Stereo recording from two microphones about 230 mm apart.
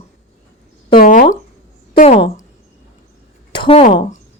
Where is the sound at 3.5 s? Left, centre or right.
Left.